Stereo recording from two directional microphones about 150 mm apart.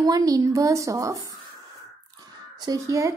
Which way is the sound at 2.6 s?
25° right (ahead or behind).